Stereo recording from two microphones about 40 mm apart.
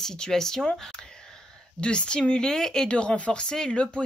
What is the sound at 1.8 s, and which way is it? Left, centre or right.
Speech, left.